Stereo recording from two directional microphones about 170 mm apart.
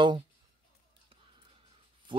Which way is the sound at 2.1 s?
30° right (ahead or behind).